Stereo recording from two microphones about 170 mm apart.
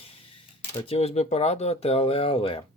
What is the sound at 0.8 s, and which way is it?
Speech, 35° left (ahead or behind).